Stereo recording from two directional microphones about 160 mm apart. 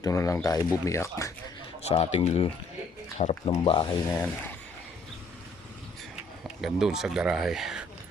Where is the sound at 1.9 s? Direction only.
40° left (ahead or behind).